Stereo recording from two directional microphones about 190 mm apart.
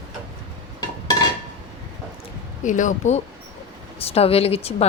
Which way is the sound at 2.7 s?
40° left (ahead or behind).